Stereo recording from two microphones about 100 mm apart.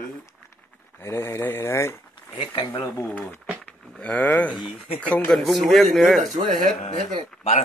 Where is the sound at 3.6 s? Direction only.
15° left (ahead or behind).